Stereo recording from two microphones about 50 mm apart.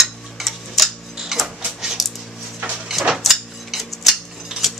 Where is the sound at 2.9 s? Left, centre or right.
Centre.